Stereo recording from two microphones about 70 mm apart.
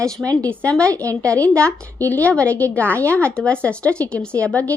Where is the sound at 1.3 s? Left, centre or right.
Centre.